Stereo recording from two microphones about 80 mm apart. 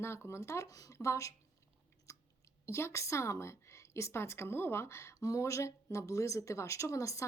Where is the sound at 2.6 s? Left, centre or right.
Left.